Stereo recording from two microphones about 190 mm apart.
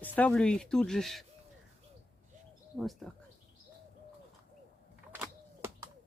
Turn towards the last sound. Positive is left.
turn(degrees=-10)  # may be behind; listen again after turning